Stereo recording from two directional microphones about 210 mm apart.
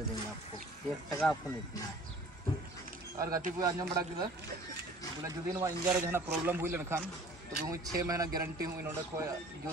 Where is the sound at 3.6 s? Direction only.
15° right (ahead or behind).